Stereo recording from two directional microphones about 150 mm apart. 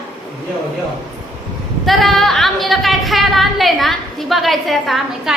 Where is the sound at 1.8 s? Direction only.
Centre (ahead or behind).